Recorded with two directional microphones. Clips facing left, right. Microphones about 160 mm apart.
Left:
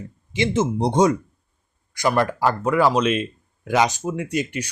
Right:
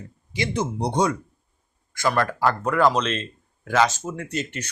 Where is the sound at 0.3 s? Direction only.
25° left (ahead or behind).